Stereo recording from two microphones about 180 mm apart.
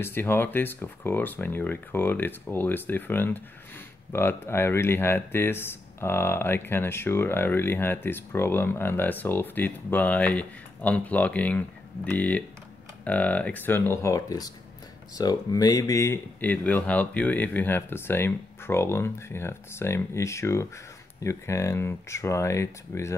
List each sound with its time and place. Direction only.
0.0 s speech: 10° left (ahead or behind)